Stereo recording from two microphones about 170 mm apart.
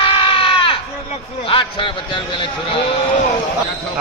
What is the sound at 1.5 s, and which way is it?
Speech, 30° left (ahead or behind).